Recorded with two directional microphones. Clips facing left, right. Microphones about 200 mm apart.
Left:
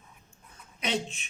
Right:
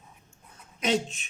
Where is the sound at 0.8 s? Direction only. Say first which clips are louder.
Right 5 dB; 45° right (ahead or behind).